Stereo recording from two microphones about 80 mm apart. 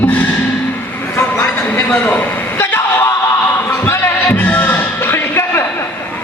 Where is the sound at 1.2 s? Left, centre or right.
Left.